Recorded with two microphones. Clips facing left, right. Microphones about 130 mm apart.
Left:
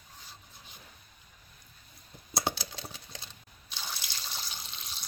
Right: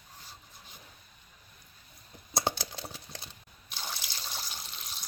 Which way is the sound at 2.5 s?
25° right (ahead or behind).